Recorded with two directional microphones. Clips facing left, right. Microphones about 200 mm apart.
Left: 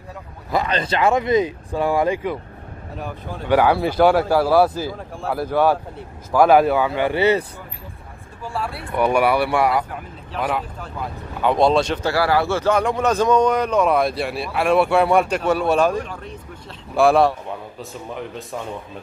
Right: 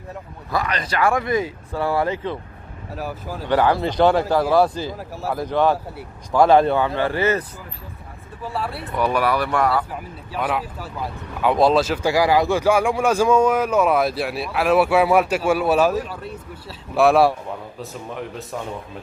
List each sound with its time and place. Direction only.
0.5 s speech: 25° left (ahead or behind)
3.0 s speech: 5° right (ahead or behind)
3.4 s speech: 10° left (ahead or behind)
8.5 s speech: centre (ahead or behind)
9.0 s speech: 15° left (ahead or behind)
10.4 s speech: centre (ahead or behind)
12.1 s a man's voice: 15° right (ahead or behind)